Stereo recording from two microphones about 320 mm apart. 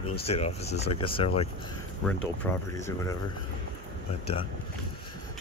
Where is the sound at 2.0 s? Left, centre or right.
Centre.